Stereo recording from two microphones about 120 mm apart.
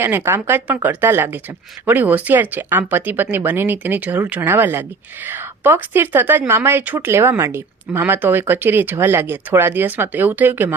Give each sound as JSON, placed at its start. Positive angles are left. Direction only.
{"t": 0.0, "sound": "speech", "side_deg": -20}